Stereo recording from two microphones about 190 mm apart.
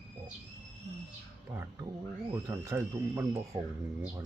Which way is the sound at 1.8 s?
20° right (ahead or behind).